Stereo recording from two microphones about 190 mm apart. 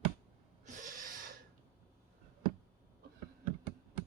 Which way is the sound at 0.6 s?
40° right (ahead or behind).